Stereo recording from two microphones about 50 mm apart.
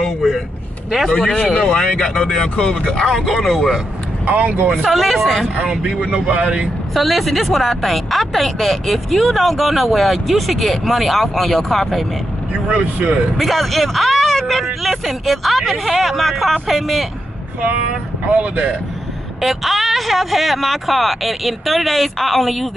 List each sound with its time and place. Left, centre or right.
0.0 s a sound: centre
1.0 s speech: centre
3.1 s speech: centre
4.3 s speech: right
4.9 s speech: centre
5.6 s speech: right
6.9 s speech: centre
12.6 s speech: right
13.4 s speech: centre
18.4 s speech: right
19.4 s speech: centre